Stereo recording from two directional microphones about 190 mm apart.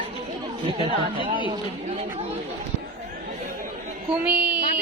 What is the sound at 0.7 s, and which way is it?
Speech, 30° right (ahead or behind).